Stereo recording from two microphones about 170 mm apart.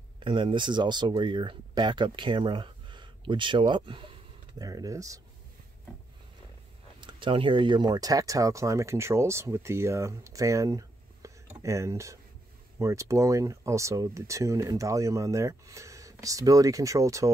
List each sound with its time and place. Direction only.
0.2 s speech: 30° right (ahead or behind)
7.0 s speech: 30° right (ahead or behind)